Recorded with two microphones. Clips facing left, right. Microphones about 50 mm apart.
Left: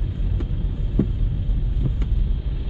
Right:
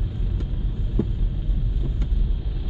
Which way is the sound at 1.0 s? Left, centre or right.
Left.